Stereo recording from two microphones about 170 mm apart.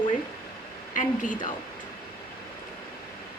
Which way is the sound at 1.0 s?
50° left (ahead or behind).